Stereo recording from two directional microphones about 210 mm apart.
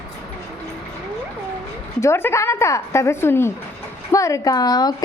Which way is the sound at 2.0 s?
10° left (ahead or behind).